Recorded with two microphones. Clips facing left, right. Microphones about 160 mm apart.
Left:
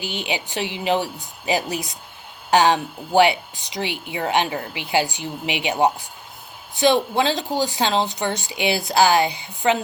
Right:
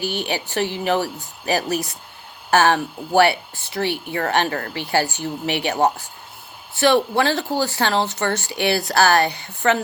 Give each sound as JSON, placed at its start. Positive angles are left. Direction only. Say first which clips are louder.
{"t": 0.0, "sound": "speech", "louder": "right 3 dB", "side_deg": 15}